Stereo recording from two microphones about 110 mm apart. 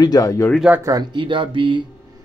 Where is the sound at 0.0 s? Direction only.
35° left (ahead or behind).